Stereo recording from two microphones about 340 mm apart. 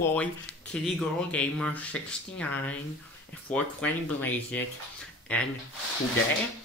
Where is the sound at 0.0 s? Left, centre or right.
Centre.